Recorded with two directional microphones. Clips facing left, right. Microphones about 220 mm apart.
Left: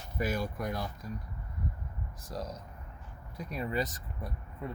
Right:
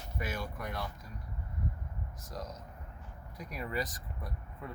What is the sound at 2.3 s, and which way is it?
Speech, 30° left (ahead or behind).